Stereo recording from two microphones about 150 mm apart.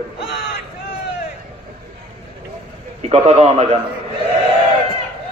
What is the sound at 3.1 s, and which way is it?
Speech, 45° right (ahead or behind).